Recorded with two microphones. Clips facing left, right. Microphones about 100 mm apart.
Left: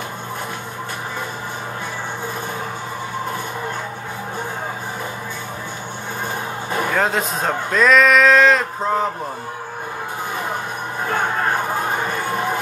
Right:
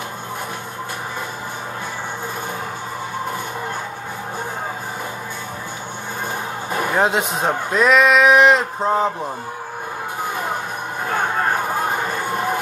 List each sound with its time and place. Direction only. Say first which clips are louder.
6.9 s speech: right 3 dB; 20° right (ahead or behind)